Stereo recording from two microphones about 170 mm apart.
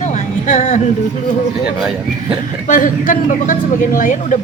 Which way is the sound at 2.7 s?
50° left (ahead or behind).